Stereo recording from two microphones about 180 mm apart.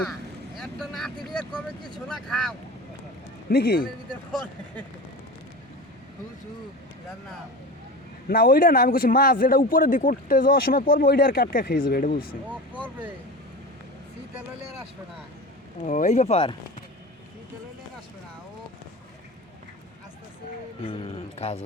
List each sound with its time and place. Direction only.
0.6 s vehicle: centre (ahead or behind)
2.0 s speech: centre (ahead or behind)
3.5 s a man's voice: 60° left (ahead or behind)
8.3 s a man's voice: 55° left (ahead or behind)
15.8 s speech: 40° left (ahead or behind)
20.8 s speech: 30° left (ahead or behind)